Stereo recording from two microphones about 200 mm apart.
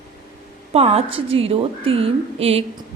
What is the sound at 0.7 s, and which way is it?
A woman's voice, 30° right (ahead or behind).